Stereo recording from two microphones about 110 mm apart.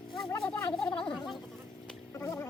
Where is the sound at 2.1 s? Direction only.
25° left (ahead or behind).